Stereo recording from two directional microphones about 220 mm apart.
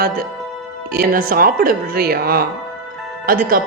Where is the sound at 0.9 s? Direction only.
40° right (ahead or behind).